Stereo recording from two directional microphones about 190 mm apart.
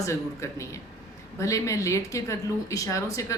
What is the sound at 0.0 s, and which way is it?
Speech, 15° left (ahead or behind).